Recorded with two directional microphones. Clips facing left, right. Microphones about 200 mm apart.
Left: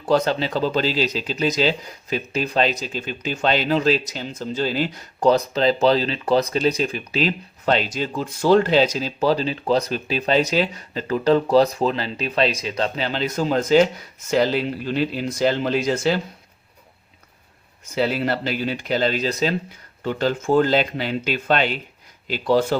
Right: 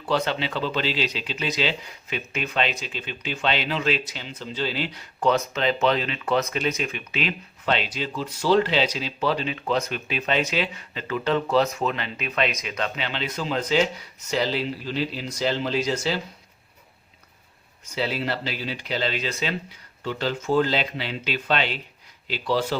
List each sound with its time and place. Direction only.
0.0 s speech: 45° left (ahead or behind)
17.9 s speech: 50° left (ahead or behind)